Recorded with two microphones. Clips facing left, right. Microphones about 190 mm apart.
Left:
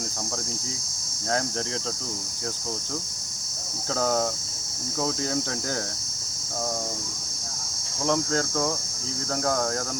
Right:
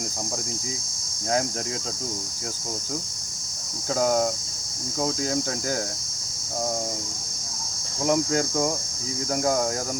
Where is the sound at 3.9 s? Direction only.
10° right (ahead or behind).